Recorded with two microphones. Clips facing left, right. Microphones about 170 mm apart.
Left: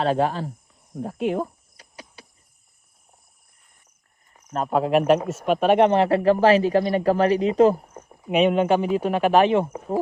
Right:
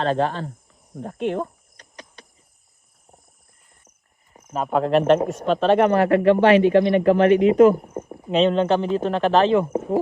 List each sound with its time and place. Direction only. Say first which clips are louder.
0.0 s speech: even; 5° left (ahead or behind)
0.9 s cricket: even; 5° left (ahead or behind)
4.5 s speech: right 1 dB; centre (ahead or behind); by 7.8 s 35° left (ahead or behind)
7.8 s a sound: right 11 dB; 35° right (ahead or behind)
8.3 s speech: even; 10° left (ahead or behind)